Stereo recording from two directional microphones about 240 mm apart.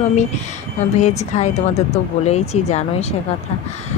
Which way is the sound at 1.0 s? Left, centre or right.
Left.